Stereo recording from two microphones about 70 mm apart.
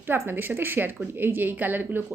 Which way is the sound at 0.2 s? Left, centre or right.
Right.